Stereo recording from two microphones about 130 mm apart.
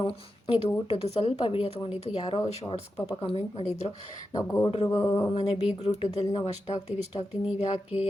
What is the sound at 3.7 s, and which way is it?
Speech, 55° left (ahead or behind).